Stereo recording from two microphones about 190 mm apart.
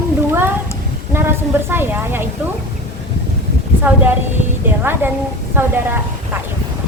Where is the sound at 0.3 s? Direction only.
10° right (ahead or behind).